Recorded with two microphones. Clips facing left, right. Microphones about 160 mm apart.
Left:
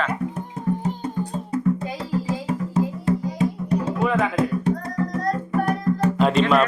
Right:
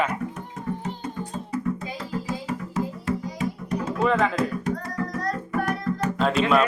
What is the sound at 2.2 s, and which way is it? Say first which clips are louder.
Music: left 4 dB; 30° left (ahead or behind).